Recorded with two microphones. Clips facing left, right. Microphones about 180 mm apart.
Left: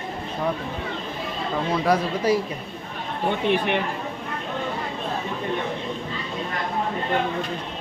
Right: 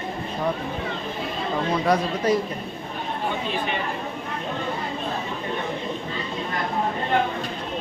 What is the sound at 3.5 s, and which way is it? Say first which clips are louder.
Speech: left 5 dB; 65° left (ahead or behind).